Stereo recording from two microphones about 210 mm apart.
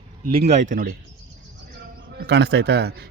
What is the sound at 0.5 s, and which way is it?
Speech, 40° right (ahead or behind).